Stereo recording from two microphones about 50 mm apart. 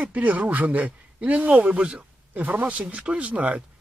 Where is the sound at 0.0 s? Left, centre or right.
Right.